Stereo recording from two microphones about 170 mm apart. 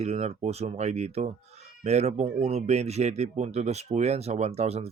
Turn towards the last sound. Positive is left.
turn(degrees=-40)  # may be behind; listen again after turning